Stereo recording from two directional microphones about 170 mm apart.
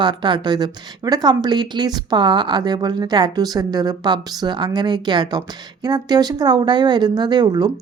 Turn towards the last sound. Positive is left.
turn(degrees=-25)  # may be behind; listen again after turning